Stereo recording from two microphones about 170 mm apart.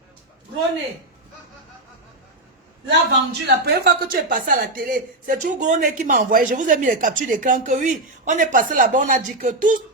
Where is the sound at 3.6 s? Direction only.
70° right (ahead or behind).